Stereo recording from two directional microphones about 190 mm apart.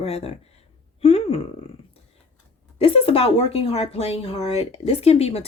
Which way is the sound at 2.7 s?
30° left (ahead or behind).